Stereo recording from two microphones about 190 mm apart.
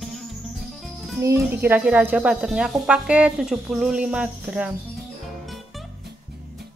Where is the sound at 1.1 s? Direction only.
15° right (ahead or behind).